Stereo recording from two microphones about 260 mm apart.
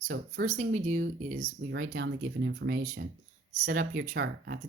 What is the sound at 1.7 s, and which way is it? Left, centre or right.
Speech, right.